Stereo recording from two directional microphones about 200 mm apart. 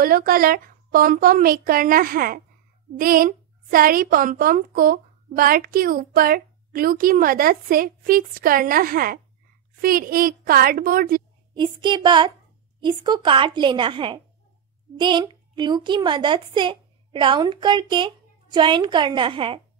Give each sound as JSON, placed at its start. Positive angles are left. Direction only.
{"t": 0.0, "sound": "a woman's voice", "side_deg": -45}
{"t": 11.5, "sound": "a woman's voice", "side_deg": -25}